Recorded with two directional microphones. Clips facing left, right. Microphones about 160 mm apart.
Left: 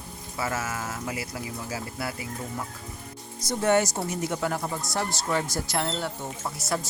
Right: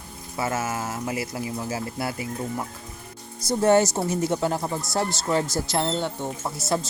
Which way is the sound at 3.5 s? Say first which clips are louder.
Right 4 dB; 30° right (ahead or behind).